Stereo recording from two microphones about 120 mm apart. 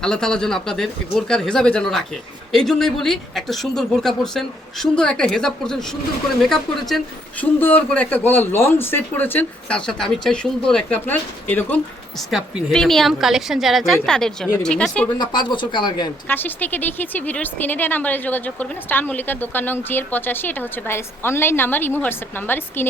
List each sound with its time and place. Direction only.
0.0 s speech: 5° left (ahead or behind)
7.6 s speech: 15° left (ahead or behind)
12.3 s speech: centre (ahead or behind)
15.2 s speech: 40° left (ahead or behind)
16.3 s speech: 15° left (ahead or behind)